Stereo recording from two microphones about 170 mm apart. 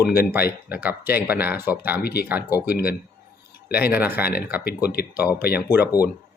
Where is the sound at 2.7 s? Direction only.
65° left (ahead or behind).